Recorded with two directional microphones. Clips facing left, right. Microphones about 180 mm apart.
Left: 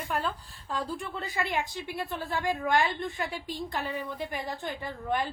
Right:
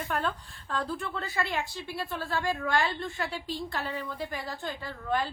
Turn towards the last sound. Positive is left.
turn(degrees=20)  # may be behind; listen again after turning